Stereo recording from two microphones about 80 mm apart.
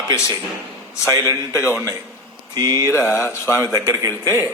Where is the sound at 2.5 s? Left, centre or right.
Right.